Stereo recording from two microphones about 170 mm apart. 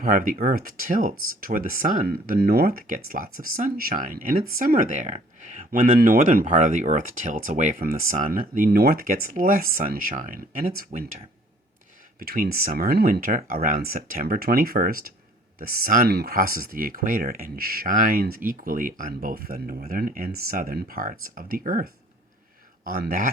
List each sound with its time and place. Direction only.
0.0 s speech: 55° right (ahead or behind)
12.2 s speech: 60° right (ahead or behind)